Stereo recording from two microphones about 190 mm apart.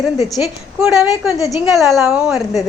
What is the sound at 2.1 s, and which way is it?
Speech, 5° right (ahead or behind).